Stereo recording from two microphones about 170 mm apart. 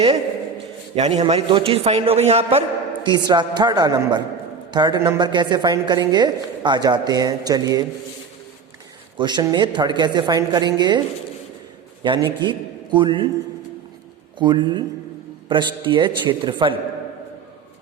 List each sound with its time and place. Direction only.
0.9 s a man's voice: 35° right (ahead or behind)
9.1 s a woman's voice: 25° right (ahead or behind)
12.0 s a woman's voice: 25° right (ahead or behind)
14.3 s a woman's voice: 25° right (ahead or behind)